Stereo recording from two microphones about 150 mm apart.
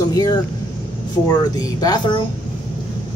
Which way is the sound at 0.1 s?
25° left (ahead or behind).